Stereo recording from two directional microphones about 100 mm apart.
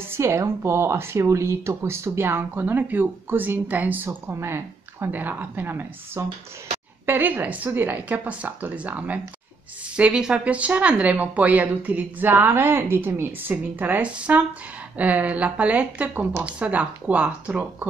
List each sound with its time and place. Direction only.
0.0 s speech: 25° right (ahead or behind)